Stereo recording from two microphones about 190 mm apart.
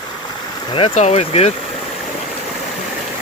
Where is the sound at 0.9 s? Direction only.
35° left (ahead or behind).